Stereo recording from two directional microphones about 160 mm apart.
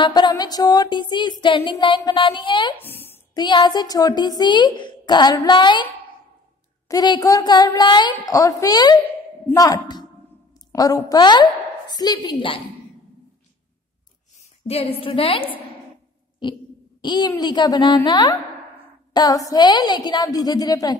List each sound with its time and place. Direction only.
0.0 s a woman's voice: 30° left (ahead or behind)
2.8 s a sound: 15° left (ahead or behind)
3.3 s speech: 30° left (ahead or behind)
6.9 s a woman's voice: 25° left (ahead or behind)
14.7 s a woman's voice: 40° left (ahead or behind)
17.0 s a woman's voice: 30° left (ahead or behind)